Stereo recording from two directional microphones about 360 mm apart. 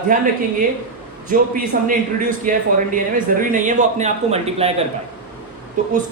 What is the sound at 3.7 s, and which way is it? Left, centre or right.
Speech, centre.